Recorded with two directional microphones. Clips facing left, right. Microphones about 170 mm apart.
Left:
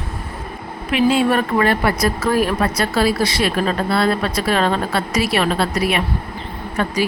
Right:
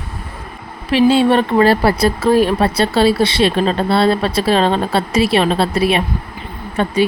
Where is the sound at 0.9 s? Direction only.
30° right (ahead or behind).